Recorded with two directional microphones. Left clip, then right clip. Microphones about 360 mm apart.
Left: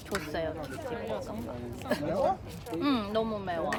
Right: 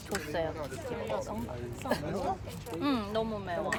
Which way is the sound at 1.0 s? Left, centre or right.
Centre.